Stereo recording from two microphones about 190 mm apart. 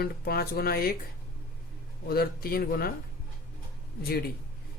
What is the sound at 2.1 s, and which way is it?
Speech, 55° left (ahead or behind).